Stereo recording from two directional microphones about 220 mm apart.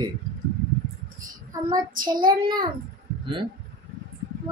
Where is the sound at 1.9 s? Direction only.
40° right (ahead or behind).